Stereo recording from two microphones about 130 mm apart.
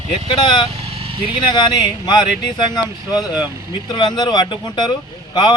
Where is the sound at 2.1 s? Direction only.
35° left (ahead or behind).